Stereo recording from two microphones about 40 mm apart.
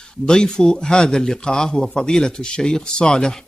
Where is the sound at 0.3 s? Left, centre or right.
Centre.